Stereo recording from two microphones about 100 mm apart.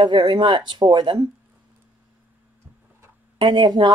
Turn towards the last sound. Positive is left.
turn(degrees=-50)  # may be behind; listen again after turning